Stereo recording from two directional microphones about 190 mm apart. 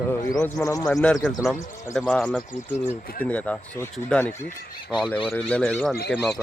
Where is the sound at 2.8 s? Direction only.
50° left (ahead or behind).